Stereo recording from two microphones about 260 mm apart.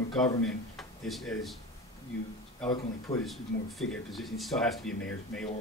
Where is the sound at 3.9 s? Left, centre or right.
Centre.